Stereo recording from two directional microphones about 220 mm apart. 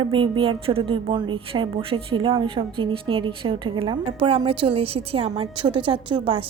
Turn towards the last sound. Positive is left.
turn(degrees=-25)  # may be behind; listen again after turning